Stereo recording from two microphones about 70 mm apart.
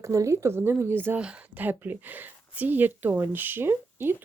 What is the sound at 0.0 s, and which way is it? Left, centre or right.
A woman's voice, right.